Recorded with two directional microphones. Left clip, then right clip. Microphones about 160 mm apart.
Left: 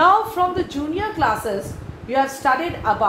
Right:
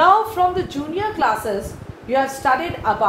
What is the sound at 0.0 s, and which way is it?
A woman's voice, 30° left (ahead or behind).